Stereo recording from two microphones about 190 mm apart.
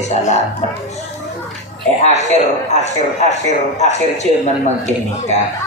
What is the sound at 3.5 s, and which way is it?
Speech, 35° left (ahead or behind).